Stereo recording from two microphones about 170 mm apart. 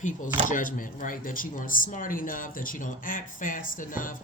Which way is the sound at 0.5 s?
50° left (ahead or behind).